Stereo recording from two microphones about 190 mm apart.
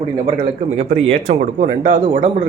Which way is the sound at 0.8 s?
35° right (ahead or behind).